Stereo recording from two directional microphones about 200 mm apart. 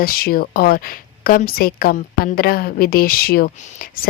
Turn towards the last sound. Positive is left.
turn(degrees=45)  # may be behind; listen again after turning